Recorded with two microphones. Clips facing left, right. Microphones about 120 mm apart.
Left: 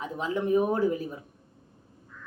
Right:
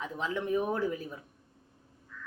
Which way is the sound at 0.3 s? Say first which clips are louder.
Left 6 dB; 40° left (ahead or behind).